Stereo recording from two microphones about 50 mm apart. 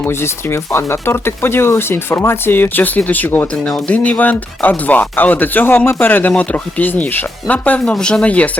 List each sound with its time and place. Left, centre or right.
0.0 s speech: left
3.4 s speech: left
6.3 s speech: left
7.9 s speech: centre